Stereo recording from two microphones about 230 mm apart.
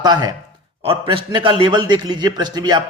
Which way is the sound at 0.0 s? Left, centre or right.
Centre.